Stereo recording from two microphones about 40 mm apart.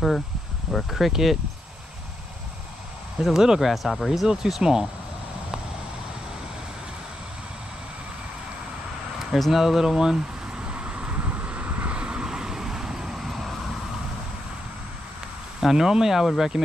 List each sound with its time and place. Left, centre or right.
0.8 s speech: centre
3.2 s speech: centre
4.3 s speech: centre
9.3 s speech: centre
10.6 s vehicle: right
11.1 s vehicle: right
11.9 s vehicle: right
12.3 s vehicle: centre
15.6 s speech: centre